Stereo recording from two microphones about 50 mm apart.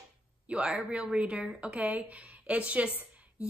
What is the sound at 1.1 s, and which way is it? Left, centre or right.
A woman's voice, right.